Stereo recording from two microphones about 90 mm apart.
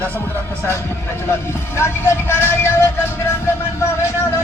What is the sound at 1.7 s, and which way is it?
A man's voice, 30° left (ahead or behind).